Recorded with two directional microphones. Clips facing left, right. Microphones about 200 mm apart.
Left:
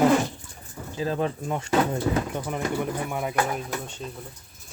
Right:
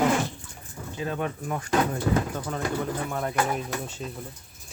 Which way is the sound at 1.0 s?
30° left (ahead or behind).